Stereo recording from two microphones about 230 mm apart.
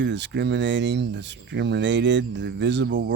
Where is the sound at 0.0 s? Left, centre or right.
Right.